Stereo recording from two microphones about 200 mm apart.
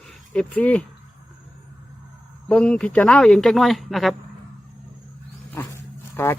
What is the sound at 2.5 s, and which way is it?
Speech, 5° left (ahead or behind).